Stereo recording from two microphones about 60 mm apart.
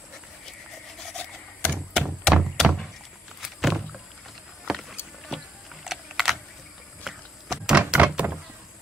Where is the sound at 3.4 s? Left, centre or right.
Centre.